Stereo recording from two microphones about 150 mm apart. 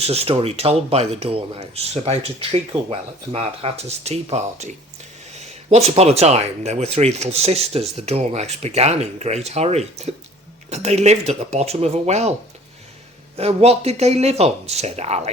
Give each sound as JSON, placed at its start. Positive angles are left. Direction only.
{"t": 0.0, "sound": "speech", "side_deg": -40}
{"t": 13.3, "sound": "speech", "side_deg": -45}